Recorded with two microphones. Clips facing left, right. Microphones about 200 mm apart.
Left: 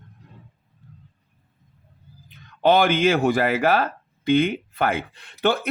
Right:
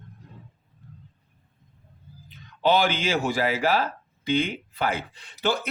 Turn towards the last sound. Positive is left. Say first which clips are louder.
# left 4 dB
turn(degrees=55)  # may be behind; listen again after turning